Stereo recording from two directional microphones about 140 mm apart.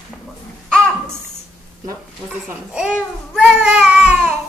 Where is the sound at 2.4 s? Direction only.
10° right (ahead or behind).